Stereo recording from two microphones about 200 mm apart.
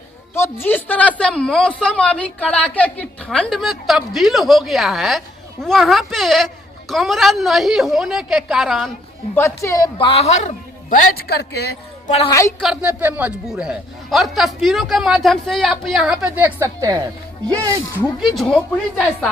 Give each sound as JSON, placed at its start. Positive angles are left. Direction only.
{"t": 0.3, "sound": "a man's voice", "side_deg": 10}
{"t": 9.3, "sound": "speech", "side_deg": 15}
{"t": 12.0, "sound": "a woman's voice", "side_deg": 30}
{"t": 12.3, "sound": "a woman's voice", "side_deg": 15}
{"t": 12.5, "sound": "a man's voice", "side_deg": 0}
{"t": 18.2, "sound": "a man's voice", "side_deg": 0}